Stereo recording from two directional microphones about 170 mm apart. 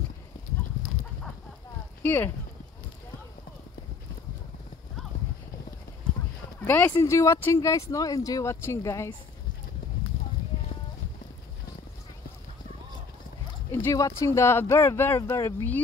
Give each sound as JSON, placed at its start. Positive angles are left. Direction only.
{"t": 2.0, "sound": "speech", "side_deg": 10}
{"t": 6.6, "sound": "speech", "side_deg": 10}
{"t": 13.7, "sound": "speech", "side_deg": 15}